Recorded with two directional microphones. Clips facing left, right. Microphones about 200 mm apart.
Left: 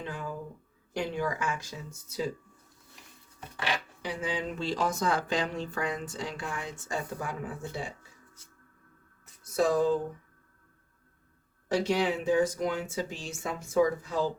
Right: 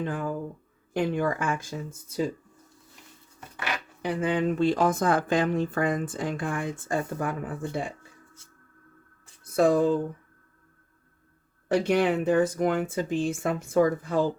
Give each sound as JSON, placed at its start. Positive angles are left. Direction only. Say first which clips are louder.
{"t": 0.0, "sound": "speech", "louder": "right 7 dB", "side_deg": -50}
{"t": 4.0, "sound": "speech", "louder": "right 10 dB", "side_deg": -55}
{"t": 9.4, "sound": "speech", "louder": "right 4 dB", "side_deg": -55}
{"t": 11.7, "sound": "speech", "louder": "right 4 dB", "side_deg": -55}